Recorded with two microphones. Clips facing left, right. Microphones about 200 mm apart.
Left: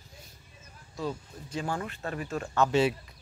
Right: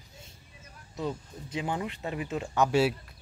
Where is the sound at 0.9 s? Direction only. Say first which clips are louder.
Right 1 dB; 20° right (ahead or behind).